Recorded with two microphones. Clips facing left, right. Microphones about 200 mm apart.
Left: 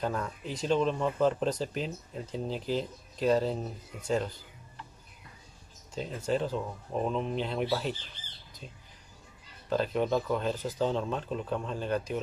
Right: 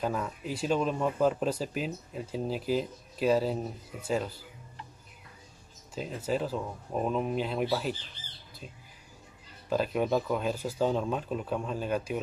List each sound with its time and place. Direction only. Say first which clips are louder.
0.0 s speech: right 1 dB; 5° right (ahead or behind)
5.9 s speech: left 1 dB; 5° right (ahead or behind)
9.7 s speech: even; 10° right (ahead or behind)